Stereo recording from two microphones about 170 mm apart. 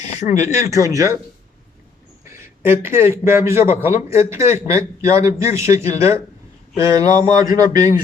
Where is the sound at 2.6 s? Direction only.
15° right (ahead or behind).